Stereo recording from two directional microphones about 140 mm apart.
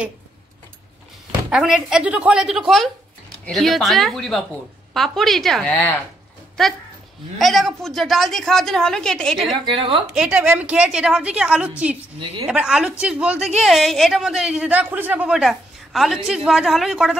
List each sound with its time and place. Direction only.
1.5 s speech: 5° right (ahead or behind)
9.7 s a woman's voice: 35° right (ahead or behind)
10.1 s a woman's voice: 5° right (ahead or behind)